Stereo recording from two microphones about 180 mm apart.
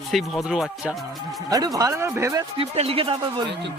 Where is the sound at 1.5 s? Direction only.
20° right (ahead or behind).